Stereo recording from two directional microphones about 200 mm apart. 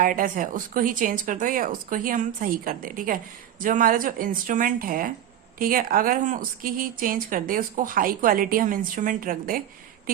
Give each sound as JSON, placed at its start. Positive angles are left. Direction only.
{"t": 0.0, "sound": "speech", "side_deg": -40}